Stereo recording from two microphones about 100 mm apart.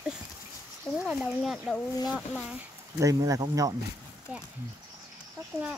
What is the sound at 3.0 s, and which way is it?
Speech, 35° right (ahead or behind).